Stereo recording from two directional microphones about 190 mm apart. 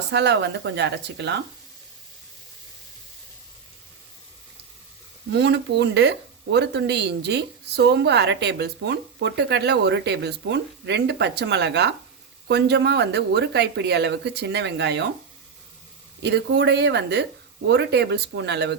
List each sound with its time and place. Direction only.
0.1 s a woman's voice: 65° right (ahead or behind)
5.3 s a woman's voice: 65° right (ahead or behind)
16.2 s a woman's voice: 60° right (ahead or behind)